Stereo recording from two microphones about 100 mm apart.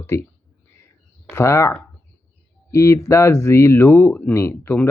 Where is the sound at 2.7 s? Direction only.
30° left (ahead or behind).